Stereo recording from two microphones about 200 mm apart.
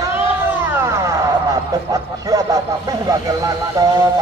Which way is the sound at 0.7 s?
10° right (ahead or behind).